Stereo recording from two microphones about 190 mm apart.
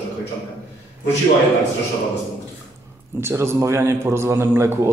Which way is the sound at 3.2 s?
15° right (ahead or behind).